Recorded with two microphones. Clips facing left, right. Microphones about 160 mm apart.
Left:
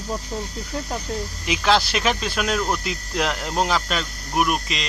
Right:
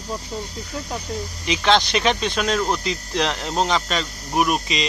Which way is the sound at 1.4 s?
5° left (ahead or behind).